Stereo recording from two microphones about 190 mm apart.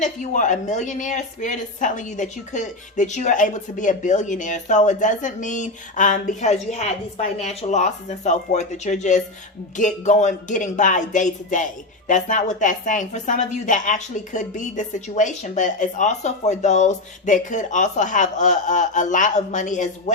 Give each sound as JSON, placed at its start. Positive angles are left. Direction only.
{"t": 0.0, "sound": "speech", "side_deg": 40}